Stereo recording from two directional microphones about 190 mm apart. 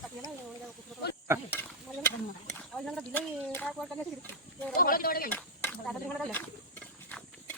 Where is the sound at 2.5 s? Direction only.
Centre (ahead or behind).